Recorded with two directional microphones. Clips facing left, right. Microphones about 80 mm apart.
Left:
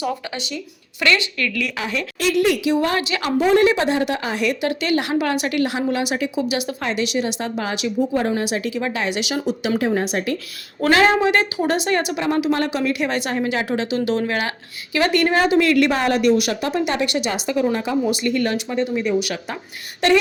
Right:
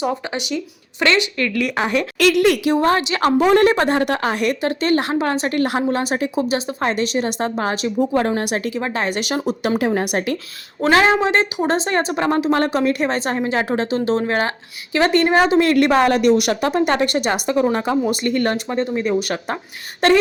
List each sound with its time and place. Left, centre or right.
0.0 s speech: right
1.6 s speech: right
2.1 s a woman's voice: right
2.6 s a woman's voice: right
4.6 s a woman's voice: right
6.6 s a woman's voice: right
8.4 s speech: right
8.8 s a woman's voice: right
9.7 s a woman's voice: right
10.8 s a woman's voice: right